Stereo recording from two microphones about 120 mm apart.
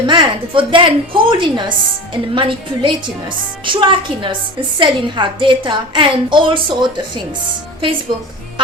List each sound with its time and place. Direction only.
0.0 s a woman's voice: 40° right (ahead or behind)